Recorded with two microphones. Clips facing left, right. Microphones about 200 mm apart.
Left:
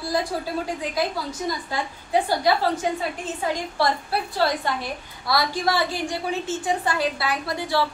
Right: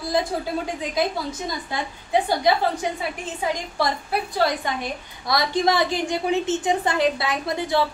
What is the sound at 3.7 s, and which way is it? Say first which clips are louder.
A woman's voice: even; 15° right (ahead or behind).